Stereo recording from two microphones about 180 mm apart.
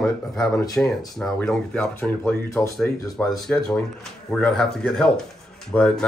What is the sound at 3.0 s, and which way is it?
Speech, 20° left (ahead or behind).